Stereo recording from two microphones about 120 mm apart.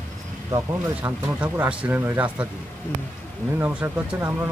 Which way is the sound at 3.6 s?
10° right (ahead or behind).